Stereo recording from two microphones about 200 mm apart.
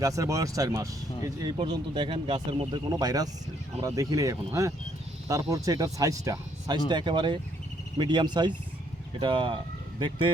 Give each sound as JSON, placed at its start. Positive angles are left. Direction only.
{"t": 0.0, "sound": "speech", "side_deg": -15}